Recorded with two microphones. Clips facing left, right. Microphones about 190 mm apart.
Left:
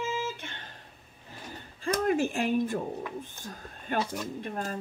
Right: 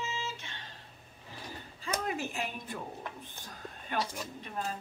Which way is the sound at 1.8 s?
50° left (ahead or behind).